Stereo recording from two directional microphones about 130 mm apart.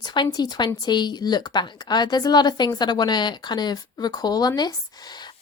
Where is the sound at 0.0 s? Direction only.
35° left (ahead or behind).